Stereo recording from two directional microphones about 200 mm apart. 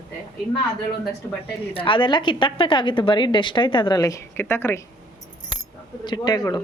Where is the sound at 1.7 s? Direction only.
25° left (ahead or behind).